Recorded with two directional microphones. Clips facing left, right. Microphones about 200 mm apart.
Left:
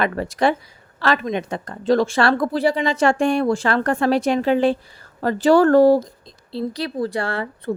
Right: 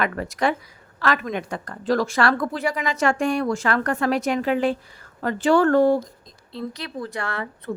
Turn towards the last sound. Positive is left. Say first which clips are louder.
# left 5 dB
turn(degrees=30)  # may be behind; listen again after turning